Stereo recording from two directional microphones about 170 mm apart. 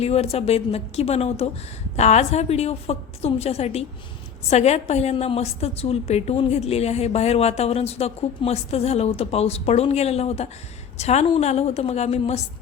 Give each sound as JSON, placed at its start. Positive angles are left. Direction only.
{"t": 0.0, "sound": "a woman's voice", "side_deg": 35}